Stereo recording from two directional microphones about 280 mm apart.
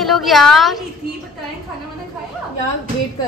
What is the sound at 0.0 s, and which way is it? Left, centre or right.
Speech, centre.